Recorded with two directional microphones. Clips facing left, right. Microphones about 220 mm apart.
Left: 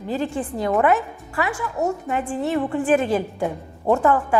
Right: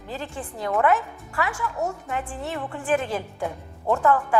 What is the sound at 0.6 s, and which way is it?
A woman's voice, 20° left (ahead or behind).